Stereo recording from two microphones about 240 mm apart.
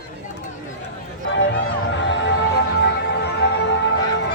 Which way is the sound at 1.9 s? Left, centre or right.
Left.